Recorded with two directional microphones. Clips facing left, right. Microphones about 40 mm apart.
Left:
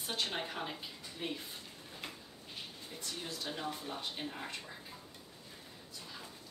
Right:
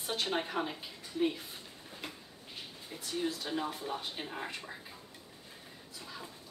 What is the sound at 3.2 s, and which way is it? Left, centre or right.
Speech, centre.